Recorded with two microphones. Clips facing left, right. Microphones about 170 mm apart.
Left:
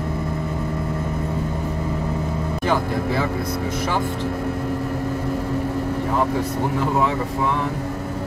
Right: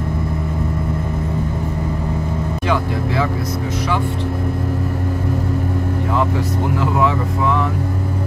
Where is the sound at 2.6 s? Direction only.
45° left (ahead or behind).